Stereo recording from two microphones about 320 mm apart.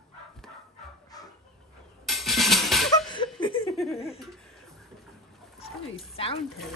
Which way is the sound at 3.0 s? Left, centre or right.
Centre.